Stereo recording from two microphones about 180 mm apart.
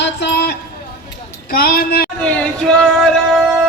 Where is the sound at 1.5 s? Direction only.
55° left (ahead or behind).